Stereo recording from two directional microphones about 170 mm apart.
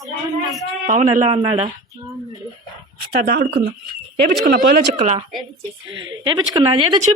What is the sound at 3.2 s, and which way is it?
Speech, 70° right (ahead or behind).